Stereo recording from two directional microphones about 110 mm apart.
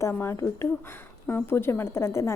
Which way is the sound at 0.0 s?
25° left (ahead or behind).